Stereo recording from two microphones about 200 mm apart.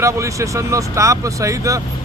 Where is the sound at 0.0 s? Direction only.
15° right (ahead or behind).